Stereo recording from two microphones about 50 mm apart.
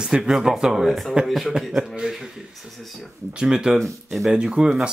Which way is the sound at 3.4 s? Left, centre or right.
Centre.